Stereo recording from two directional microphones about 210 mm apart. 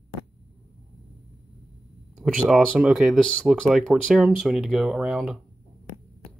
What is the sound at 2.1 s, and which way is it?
Speech, centre (ahead or behind).